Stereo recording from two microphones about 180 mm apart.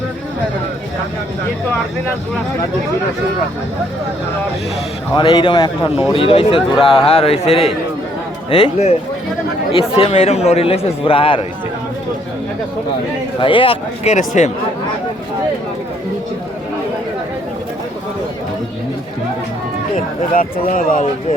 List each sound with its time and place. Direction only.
5.1 s speech: 25° left (ahead or behind)
13.4 s speech: 30° left (ahead or behind)
20.3 s speech: 50° left (ahead or behind)